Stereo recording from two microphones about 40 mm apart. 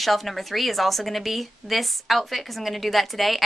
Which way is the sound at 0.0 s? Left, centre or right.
Centre.